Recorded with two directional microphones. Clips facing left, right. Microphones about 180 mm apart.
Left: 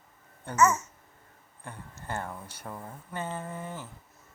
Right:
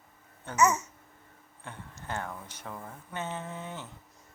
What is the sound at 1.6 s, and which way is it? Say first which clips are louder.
Speech: left 1 dB; 10° left (ahead or behind).